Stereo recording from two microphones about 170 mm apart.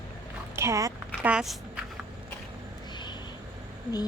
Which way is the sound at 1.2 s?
5° right (ahead or behind).